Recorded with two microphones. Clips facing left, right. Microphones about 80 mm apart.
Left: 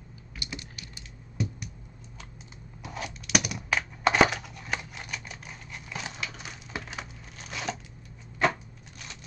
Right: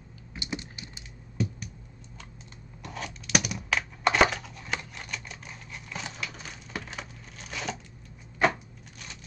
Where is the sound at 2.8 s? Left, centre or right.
Centre.